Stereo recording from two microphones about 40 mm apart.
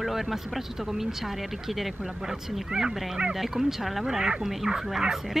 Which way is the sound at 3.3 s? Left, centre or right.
Centre.